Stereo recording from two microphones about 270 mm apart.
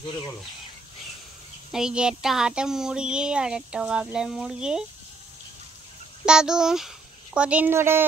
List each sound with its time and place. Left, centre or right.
1.7 s speech: centre
6.2 s speech: centre